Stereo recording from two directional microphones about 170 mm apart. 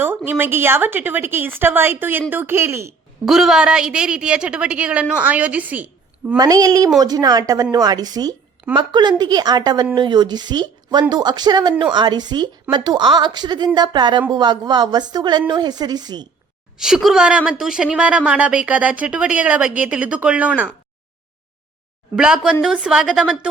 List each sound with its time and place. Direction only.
0.3 s a woman's voice: 10° right (ahead or behind)
3.2 s a woman's voice: centre (ahead or behind)
6.3 s a woman's voice: 20° right (ahead or behind)
16.7 s a woman's voice: 5° right (ahead or behind)
22.1 s a woman's voice: 5° right (ahead or behind)